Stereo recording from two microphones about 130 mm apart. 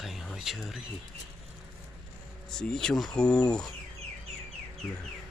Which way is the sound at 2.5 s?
5° left (ahead or behind).